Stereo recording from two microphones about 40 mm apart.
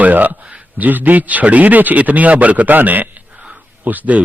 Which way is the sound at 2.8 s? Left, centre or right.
Right.